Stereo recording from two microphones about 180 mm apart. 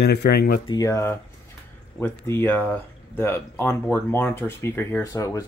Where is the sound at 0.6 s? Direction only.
20° left (ahead or behind).